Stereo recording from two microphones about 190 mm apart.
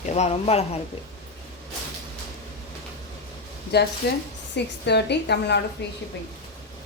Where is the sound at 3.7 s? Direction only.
60° left (ahead or behind).